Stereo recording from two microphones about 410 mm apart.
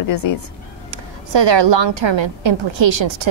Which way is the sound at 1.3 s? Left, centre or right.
Right.